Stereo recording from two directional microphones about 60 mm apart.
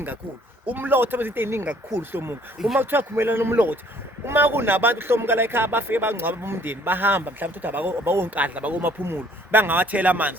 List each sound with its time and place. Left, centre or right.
0.7 s a man's voice: right
8.4 s speech: right